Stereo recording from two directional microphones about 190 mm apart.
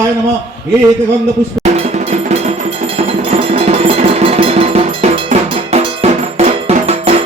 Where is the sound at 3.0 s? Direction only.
30° right (ahead or behind).